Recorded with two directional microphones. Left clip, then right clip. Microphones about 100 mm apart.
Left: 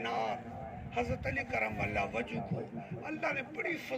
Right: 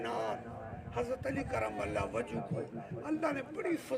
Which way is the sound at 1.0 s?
60° right (ahead or behind).